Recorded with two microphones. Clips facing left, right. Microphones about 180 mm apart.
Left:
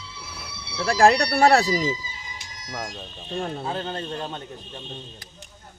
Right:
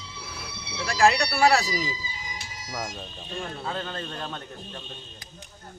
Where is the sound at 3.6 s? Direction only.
25° left (ahead or behind).